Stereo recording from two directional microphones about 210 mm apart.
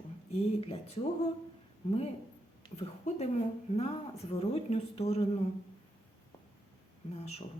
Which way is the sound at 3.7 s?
30° left (ahead or behind).